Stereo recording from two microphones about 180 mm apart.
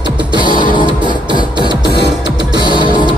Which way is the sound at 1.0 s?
25° right (ahead or behind).